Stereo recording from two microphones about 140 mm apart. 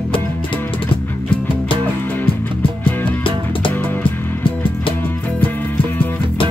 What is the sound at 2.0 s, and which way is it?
Music, 15° left (ahead or behind).